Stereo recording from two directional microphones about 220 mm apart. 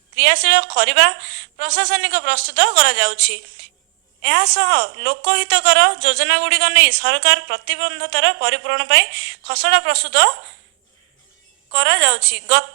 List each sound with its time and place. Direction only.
0.2 s a woman's voice: 55° right (ahead or behind)
4.2 s a woman's voice: 50° right (ahead or behind)
11.7 s a woman's voice: 55° right (ahead or behind)